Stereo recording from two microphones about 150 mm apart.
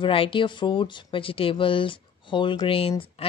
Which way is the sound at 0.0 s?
35° left (ahead or behind).